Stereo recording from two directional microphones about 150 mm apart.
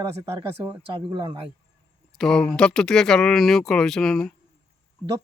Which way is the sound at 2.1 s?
5° left (ahead or behind).